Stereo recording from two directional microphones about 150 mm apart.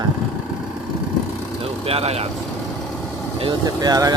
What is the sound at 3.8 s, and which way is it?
Speech, 25° right (ahead or behind).